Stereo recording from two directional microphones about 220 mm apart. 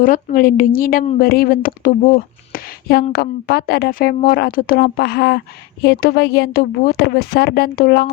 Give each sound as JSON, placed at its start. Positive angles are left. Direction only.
{"t": 0.0, "sound": "a woman's voice", "side_deg": 40}